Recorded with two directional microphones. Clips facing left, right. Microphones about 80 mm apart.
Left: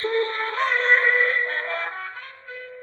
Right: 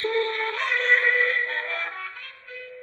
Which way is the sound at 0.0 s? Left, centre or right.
Left.